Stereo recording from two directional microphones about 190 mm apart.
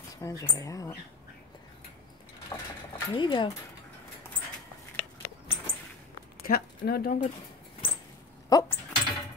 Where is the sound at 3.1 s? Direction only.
25° left (ahead or behind).